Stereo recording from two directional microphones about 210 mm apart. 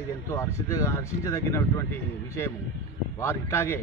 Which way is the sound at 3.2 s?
10° left (ahead or behind).